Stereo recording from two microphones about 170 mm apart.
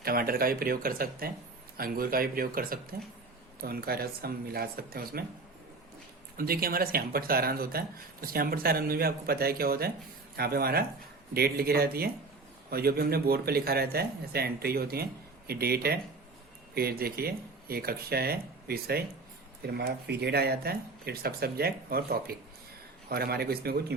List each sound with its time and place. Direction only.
0.0 s speech: 60° right (ahead or behind)
6.3 s speech: 60° right (ahead or behind)